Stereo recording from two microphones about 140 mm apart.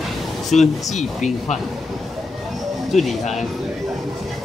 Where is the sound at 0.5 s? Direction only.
55° left (ahead or behind).